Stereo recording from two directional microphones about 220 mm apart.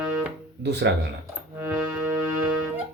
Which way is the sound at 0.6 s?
50° right (ahead or behind).